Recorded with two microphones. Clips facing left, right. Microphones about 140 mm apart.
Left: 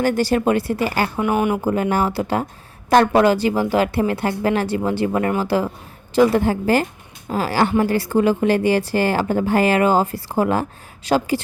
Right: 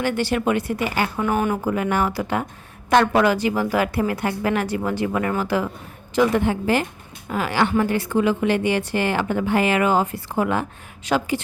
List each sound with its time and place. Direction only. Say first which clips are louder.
0.0 s a woman's voice: left 4 dB; 40° left (ahead or behind)
1.1 s speech: left 2 dB; 15° left (ahead or behind)
1.6 s a woman's voice: left 2 dB; 30° left (ahead or behind)